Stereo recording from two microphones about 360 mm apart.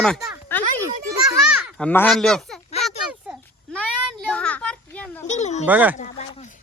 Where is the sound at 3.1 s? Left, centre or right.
Centre.